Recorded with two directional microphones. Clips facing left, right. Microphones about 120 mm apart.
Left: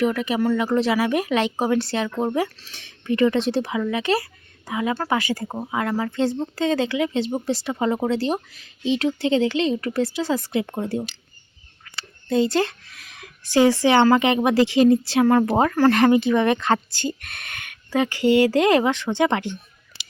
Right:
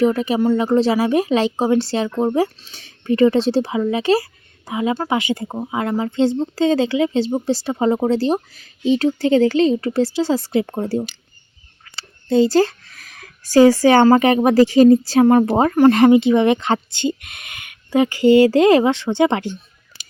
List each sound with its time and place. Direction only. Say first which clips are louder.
0.0 s speech: right 5 dB; 30° right (ahead or behind)
2.0 s speech: right 5 dB; 20° right (ahead or behind)
7.3 s speech: right 4 dB; 20° right (ahead or behind)
7.5 s speech: right 5 dB; 30° right (ahead or behind)
15.3 s speech: right 4 dB; 25° right (ahead or behind)